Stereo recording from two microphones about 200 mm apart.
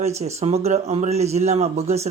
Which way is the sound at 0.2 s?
35° right (ahead or behind).